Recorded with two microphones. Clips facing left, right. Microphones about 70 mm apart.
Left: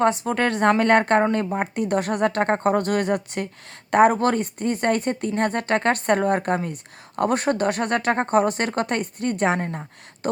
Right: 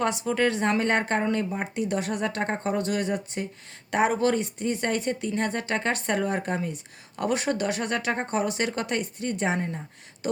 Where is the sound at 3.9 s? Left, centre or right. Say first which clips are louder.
Left 6 dB; left.